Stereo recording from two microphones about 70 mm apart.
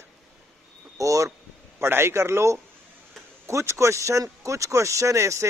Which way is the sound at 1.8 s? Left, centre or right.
Right.